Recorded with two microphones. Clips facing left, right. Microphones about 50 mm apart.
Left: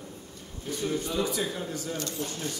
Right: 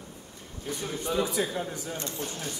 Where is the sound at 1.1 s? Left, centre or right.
Centre.